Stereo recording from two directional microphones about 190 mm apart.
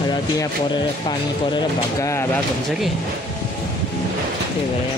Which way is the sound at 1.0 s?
20° left (ahead or behind).